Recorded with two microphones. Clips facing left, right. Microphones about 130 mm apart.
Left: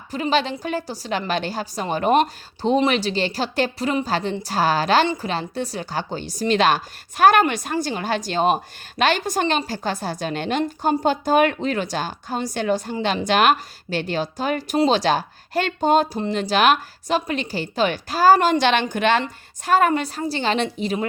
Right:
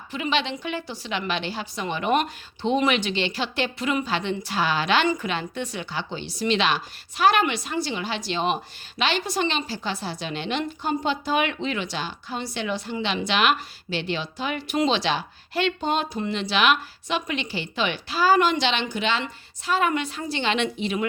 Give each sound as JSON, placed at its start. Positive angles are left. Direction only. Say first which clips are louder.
{"t": 0.1, "sound": "a woman's voice", "louder": "left 4 dB", "side_deg": 40}